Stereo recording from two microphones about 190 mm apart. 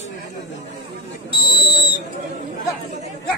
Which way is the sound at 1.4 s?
25° left (ahead or behind).